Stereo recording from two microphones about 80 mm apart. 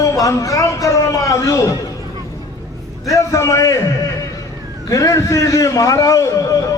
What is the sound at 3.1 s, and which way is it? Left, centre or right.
Speech, left.